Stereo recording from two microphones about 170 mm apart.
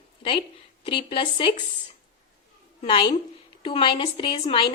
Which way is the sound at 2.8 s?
30° left (ahead or behind).